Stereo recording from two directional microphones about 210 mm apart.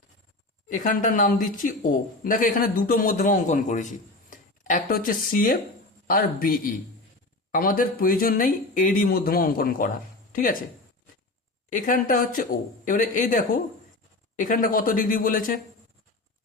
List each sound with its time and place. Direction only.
0.7 s speech: 35° left (ahead or behind)
11.7 s speech: 40° left (ahead or behind)